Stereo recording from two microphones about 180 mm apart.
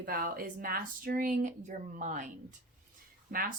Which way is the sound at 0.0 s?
55° right (ahead or behind).